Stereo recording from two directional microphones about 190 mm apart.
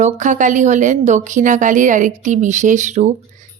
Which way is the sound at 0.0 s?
40° right (ahead or behind).